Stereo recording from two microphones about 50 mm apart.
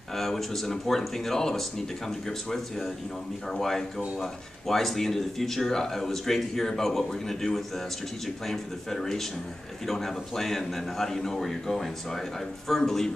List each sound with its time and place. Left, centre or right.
0.1 s speech: centre